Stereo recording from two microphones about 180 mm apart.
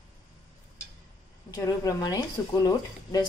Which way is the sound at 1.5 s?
20° left (ahead or behind).